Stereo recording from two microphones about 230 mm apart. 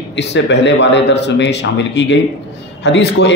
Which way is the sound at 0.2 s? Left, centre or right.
Left.